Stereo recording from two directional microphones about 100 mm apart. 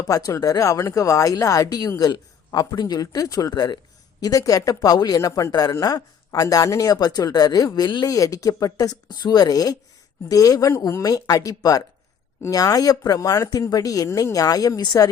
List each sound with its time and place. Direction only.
0.0 s speech: 35° left (ahead or behind)
7.9 s speech: 50° left (ahead or behind)
8.1 s speech: 35° left (ahead or behind)